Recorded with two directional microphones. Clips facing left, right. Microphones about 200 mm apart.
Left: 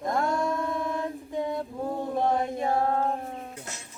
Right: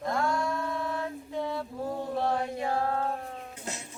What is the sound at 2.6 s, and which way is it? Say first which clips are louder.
Mantra: left 4 dB; 20° left (ahead or behind).